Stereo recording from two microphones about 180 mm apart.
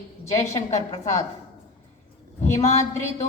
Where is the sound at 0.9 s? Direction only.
40° left (ahead or behind).